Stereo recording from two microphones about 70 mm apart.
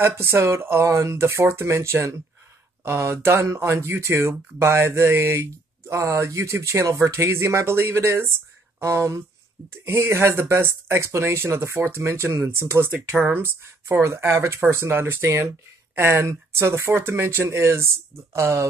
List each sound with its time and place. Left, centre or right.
0.0 s speech: right
12.9 s speech: right
13.3 s speech: right